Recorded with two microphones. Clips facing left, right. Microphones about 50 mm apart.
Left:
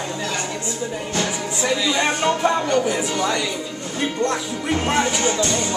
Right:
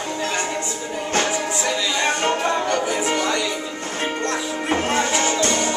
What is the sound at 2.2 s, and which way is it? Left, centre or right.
Music, right.